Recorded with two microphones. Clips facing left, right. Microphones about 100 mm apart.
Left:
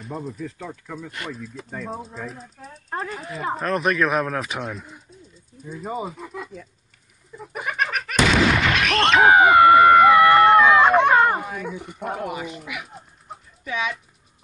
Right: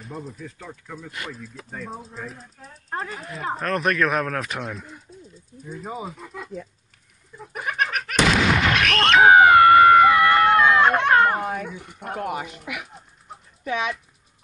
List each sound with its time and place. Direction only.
0.0 s speech: centre (ahead or behind)
7.5 s explosion: centre (ahead or behind)
11.6 s speech: centre (ahead or behind)